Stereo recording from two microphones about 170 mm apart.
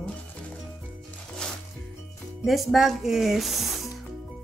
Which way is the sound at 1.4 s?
5° left (ahead or behind).